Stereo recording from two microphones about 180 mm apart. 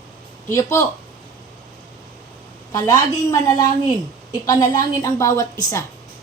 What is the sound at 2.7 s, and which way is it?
Speech, 20° left (ahead or behind).